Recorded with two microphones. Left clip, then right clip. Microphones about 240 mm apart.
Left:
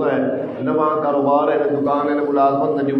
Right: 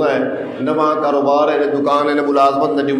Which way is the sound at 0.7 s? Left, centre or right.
Right.